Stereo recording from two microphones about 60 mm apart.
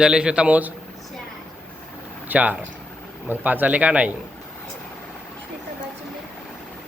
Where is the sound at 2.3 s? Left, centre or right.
Right.